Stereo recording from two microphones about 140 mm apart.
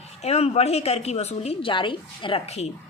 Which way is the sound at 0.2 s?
50° left (ahead or behind).